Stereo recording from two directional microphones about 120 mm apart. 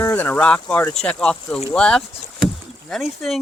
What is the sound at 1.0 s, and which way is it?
Speech, 5° left (ahead or behind).